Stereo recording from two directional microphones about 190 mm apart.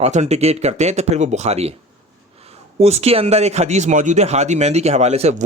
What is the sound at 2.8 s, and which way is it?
Speech, 35° right (ahead or behind).